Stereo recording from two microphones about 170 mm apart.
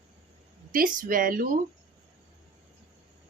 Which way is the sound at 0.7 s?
55° right (ahead or behind).